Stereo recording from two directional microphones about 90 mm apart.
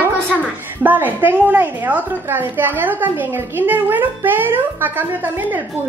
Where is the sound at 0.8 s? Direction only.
20° right (ahead or behind).